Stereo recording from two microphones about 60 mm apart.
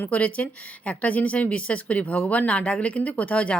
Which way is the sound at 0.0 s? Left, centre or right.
Left.